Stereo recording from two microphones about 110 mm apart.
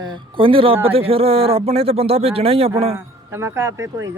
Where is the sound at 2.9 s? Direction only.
25° right (ahead or behind).